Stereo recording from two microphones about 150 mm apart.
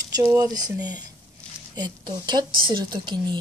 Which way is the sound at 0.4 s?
25° right (ahead or behind).